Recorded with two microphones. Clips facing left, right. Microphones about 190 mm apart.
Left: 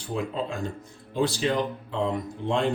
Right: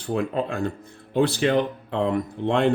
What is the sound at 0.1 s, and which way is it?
Speech, 60° right (ahead or behind).